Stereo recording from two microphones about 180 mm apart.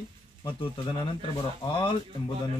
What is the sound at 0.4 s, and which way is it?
Speech, 25° left (ahead or behind).